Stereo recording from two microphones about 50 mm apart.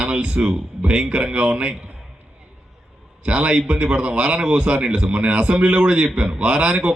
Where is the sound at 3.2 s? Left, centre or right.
Right.